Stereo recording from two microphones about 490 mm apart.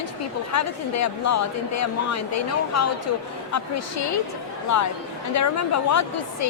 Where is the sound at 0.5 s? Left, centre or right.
Left.